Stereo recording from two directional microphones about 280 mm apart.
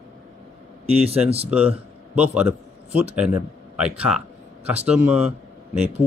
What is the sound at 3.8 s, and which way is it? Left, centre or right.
A man's voice, centre.